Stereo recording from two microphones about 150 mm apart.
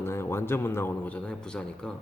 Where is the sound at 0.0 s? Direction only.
15° left (ahead or behind).